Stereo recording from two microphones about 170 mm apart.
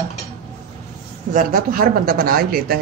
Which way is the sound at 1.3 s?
50° right (ahead or behind).